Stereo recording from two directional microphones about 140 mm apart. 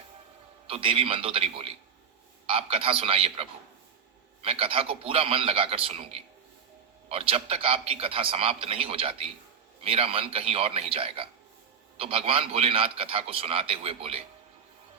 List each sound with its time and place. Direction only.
0.7 s a man's voice: 40° right (ahead or behind)
4.4 s a man's voice: 40° right (ahead or behind)